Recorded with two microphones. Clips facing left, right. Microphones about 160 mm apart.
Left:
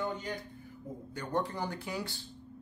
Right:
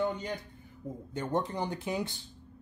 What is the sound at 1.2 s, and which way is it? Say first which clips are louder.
Speech: right 2 dB; 20° right (ahead or behind).